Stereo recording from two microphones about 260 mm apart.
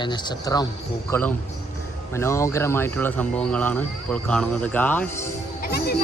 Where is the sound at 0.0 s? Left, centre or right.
Centre.